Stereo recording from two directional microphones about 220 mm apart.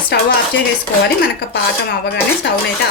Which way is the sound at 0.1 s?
50° left (ahead or behind).